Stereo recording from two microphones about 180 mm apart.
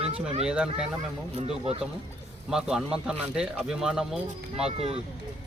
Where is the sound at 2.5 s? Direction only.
5° right (ahead or behind).